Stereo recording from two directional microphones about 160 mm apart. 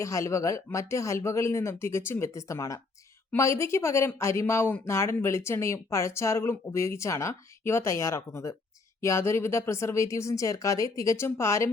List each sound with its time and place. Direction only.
0.0 s speech: 20° left (ahead or behind)